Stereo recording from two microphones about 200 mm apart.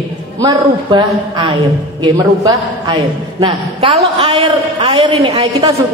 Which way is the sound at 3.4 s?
25° right (ahead or behind).